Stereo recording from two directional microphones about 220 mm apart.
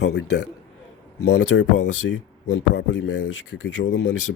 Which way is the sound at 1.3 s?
55° left (ahead or behind).